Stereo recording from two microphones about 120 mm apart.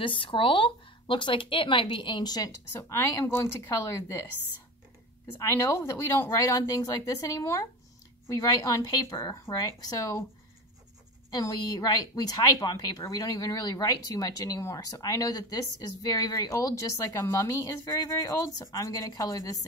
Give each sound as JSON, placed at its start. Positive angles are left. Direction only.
{"t": 0.0, "sound": "speech", "side_deg": 45}
{"t": 5.4, "sound": "a woman's voice", "side_deg": 20}
{"t": 11.2, "sound": "a woman's voice", "side_deg": 30}